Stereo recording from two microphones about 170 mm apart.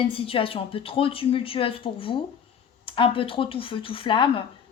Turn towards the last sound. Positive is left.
turn(degrees=30)  # may be behind; listen again after turning